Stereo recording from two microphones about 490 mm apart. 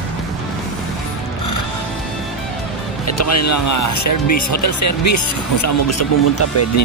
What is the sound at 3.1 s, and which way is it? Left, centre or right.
Speech, left.